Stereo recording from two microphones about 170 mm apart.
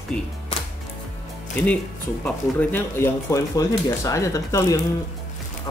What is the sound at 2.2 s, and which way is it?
Speech, 10° left (ahead or behind).